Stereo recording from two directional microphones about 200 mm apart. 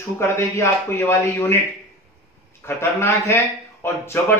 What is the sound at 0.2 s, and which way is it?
Speech, 15° left (ahead or behind).